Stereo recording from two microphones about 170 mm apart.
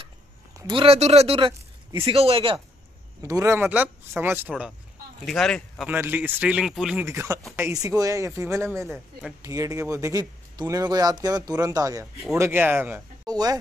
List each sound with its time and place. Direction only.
0.6 s speech: 30° right (ahead or behind)
3.2 s speech: 20° right (ahead or behind)
5.2 s speech: 5° left (ahead or behind)
5.9 s speech: 10° right (ahead or behind)
7.1 s speech: 15° right (ahead or behind)
8.8 s speech: centre (ahead or behind)
9.4 s speech: 20° right (ahead or behind)
13.3 s speech: 20° right (ahead or behind)